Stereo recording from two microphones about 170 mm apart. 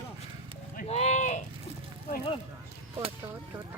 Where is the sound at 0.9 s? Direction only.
40° left (ahead or behind).